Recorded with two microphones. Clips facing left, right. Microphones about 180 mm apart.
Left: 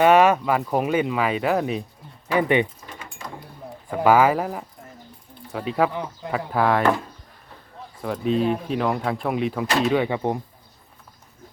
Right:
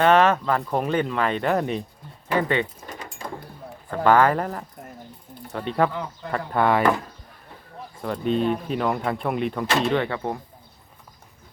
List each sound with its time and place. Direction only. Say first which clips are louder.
0.0 s speech: left 2 dB; 10° left (ahead or behind)
2.3 s speech: left 3 dB; 15° left (ahead or behind)
3.8 s speech: left 1 dB; 10° left (ahead or behind)
5.9 s speech: left 1 dB; 15° left (ahead or behind)
6.3 s speech: even; centre (ahead or behind)
8.0 s speech: left 1 dB; centre (ahead or behind); by 10.4 s 15° left (ahead or behind)